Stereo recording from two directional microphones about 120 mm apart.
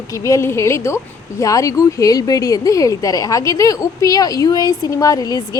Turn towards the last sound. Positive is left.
turn(degrees=30)  # may be behind; listen again after turning